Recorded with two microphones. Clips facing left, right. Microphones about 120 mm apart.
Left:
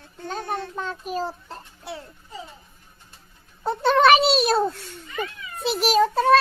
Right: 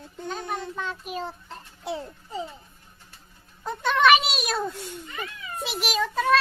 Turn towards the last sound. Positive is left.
turn(degrees=35)  # may be behind; listen again after turning